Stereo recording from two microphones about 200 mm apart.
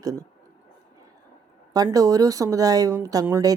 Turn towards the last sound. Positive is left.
turn(degrees=-20)  # may be behind; listen again after turning